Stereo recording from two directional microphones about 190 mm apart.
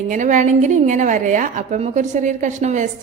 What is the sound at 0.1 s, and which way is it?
A woman's voice, 40° right (ahead or behind).